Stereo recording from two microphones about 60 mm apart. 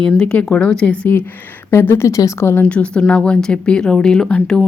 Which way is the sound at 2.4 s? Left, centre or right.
Left.